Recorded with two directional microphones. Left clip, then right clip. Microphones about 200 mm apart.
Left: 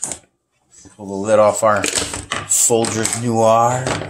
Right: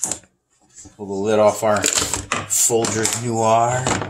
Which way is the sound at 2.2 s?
25° left (ahead or behind).